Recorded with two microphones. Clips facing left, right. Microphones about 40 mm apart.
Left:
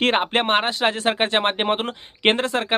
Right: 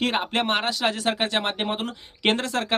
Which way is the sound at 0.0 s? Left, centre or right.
Left.